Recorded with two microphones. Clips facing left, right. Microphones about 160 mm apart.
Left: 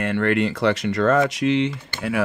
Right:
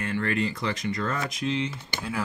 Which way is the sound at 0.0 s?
70° left (ahead or behind).